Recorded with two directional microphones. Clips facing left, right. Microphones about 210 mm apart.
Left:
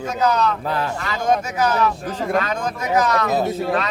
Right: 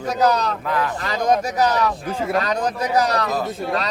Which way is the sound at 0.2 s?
35° right (ahead or behind).